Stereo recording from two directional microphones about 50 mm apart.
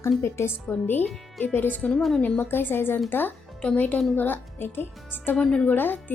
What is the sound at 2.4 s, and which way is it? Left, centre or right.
Speech, left.